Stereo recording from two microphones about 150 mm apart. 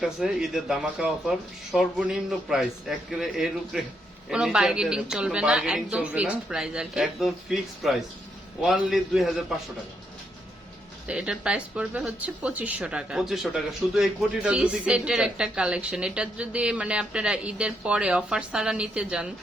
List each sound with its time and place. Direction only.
0.0 s speech: 5° right (ahead or behind)
11.1 s speech: 5° right (ahead or behind)